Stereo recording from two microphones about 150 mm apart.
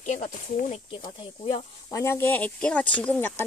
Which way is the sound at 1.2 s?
30° left (ahead or behind).